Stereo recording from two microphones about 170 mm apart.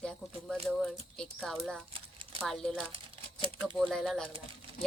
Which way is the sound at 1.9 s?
35° right (ahead or behind).